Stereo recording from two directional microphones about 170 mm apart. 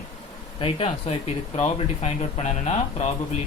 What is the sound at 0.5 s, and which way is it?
Speech, 35° left (ahead or behind).